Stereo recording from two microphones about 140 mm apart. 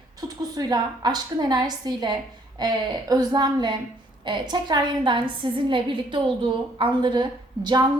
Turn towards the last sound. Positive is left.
turn(degrees=-35)  # may be behind; listen again after turning